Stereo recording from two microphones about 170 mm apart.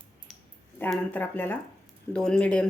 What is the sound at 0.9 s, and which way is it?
Speech, 10° left (ahead or behind).